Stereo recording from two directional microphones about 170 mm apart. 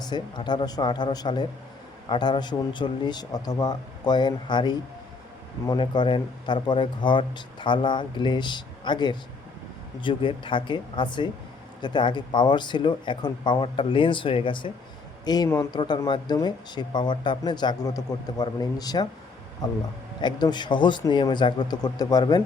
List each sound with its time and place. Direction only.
0.0 s speech: 25° left (ahead or behind)